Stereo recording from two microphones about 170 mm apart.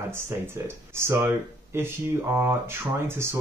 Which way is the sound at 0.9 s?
15° right (ahead or behind).